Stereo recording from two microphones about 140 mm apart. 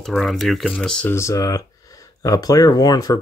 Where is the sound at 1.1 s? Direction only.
20° left (ahead or behind).